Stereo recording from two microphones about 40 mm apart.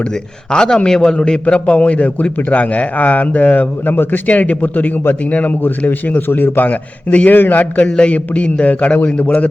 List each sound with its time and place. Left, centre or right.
0.1 s a man's voice: centre; by 3.9 s left
3.9 s a man's voice: left
4.3 s a man's voice: left
5.5 s a man's voice: left
6.7 s a man's voice: left
7.3 s speech: left
7.8 s a man's voice: left